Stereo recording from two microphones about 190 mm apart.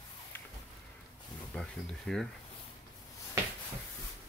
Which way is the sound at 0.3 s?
10° left (ahead or behind).